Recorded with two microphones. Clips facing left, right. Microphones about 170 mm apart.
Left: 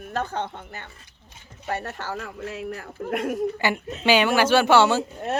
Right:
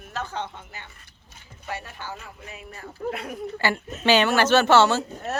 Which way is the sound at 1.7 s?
65° left (ahead or behind).